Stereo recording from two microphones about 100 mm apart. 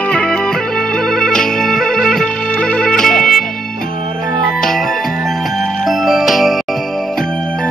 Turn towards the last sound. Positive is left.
turn(degrees=0)  # may be behind; listen again after turning